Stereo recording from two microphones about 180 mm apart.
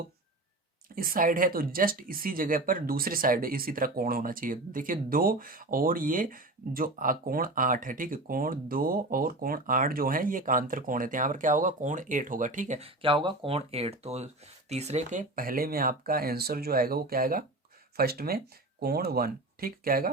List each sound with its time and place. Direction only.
0.9 s speech: 50° right (ahead or behind)